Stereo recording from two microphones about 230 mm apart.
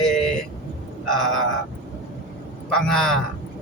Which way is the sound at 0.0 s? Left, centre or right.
Centre.